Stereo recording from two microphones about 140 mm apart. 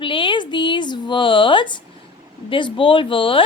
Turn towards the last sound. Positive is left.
turn(degrees=40)  # may be behind; listen again after turning